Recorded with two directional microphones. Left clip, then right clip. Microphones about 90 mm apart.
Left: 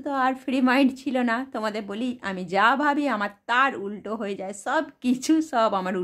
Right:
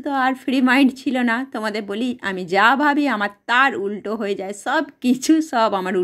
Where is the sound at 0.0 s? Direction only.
25° right (ahead or behind).